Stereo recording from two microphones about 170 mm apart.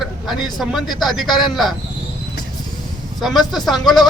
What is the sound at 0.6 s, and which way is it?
Speech, centre (ahead or behind).